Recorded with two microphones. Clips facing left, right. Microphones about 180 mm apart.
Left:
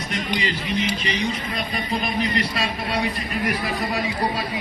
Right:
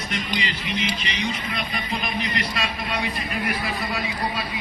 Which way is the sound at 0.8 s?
35° left (ahead or behind).